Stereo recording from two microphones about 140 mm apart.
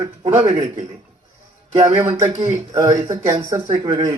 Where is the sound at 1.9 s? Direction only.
40° right (ahead or behind).